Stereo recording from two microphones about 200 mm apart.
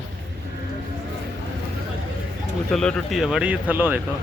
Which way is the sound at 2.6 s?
Centre (ahead or behind).